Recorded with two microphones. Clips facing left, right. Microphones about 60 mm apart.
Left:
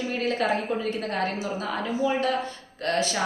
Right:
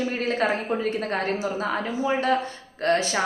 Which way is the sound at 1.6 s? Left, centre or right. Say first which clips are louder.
Right 1 dB; right.